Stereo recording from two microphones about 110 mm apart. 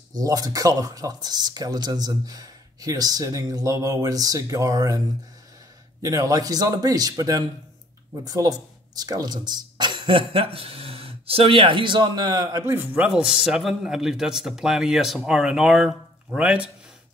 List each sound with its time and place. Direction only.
0.1 s speech: 35° right (ahead or behind)
6.0 s speech: 30° right (ahead or behind)
13.0 s speech: 5° right (ahead or behind)